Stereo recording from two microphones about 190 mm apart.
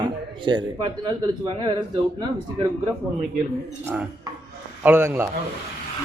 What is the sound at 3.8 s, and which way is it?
A man's voice, 10° right (ahead or behind).